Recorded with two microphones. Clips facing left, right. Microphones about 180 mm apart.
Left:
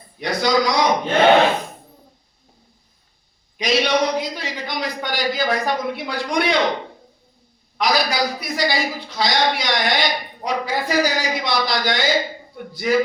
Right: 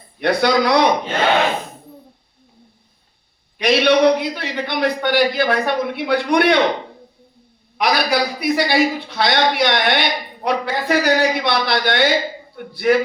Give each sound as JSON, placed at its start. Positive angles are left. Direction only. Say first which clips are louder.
{"t": 0.2, "sound": "a man's voice", "louder": "right 3 dB", "side_deg": -60}
{"t": 3.6, "sound": "a man's voice", "louder": "right 5 dB", "side_deg": -60}
{"t": 7.8, "sound": "a man's voice", "louder": "right 2 dB", "side_deg": -60}